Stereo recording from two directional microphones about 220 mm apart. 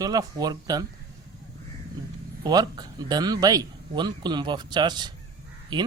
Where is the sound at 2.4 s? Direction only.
15° right (ahead or behind).